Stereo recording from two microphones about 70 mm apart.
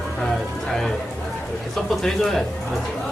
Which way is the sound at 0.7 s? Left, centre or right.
Centre.